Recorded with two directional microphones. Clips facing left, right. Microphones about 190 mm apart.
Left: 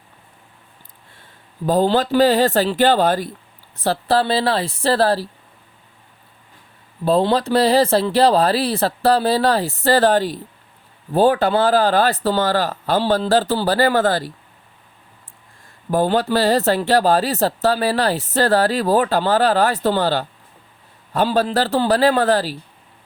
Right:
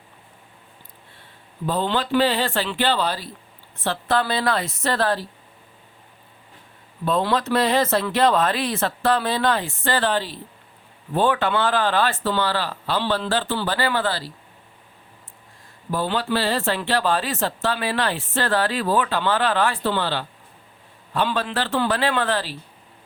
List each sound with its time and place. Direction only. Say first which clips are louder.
1.6 s speech: left 7 dB; 40° left (ahead or behind)
3.8 s speech: left 5 dB; 35° left (ahead or behind)
7.0 s speech: left 5 dB; 30° left (ahead or behind)
15.9 s speech: left 6 dB; 45° left (ahead or behind)